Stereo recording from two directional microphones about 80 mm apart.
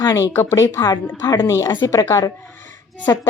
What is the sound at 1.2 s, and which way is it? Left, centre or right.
A woman's voice, left.